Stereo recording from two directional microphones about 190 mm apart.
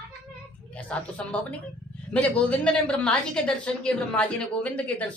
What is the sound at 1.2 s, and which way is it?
A woman's voice, 5° left (ahead or behind).